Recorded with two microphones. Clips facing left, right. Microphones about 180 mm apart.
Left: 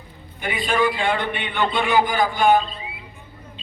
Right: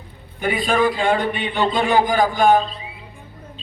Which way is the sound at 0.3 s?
45° right (ahead or behind).